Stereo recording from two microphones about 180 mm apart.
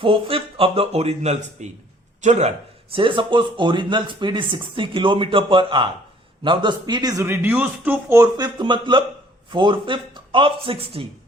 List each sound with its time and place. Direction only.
0.0 s speech: 30° right (ahead or behind)